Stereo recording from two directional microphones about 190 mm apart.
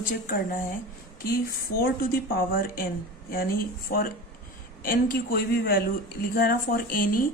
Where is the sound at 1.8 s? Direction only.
50° left (ahead or behind).